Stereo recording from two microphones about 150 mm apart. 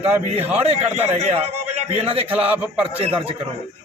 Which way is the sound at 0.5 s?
45° right (ahead or behind).